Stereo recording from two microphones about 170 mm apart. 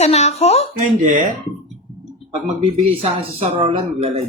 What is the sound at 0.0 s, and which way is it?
Speech, 40° left (ahead or behind).